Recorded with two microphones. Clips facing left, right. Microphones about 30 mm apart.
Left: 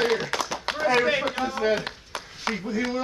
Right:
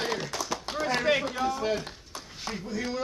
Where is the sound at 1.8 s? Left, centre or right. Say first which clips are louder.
Left 6 dB; left.